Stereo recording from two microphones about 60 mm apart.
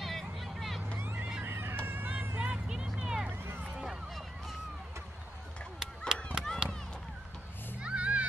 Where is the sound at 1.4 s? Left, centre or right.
Right.